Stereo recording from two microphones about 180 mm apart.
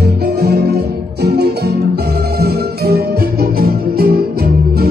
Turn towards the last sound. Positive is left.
turn(degrees=-60)  # may be behind; listen again after turning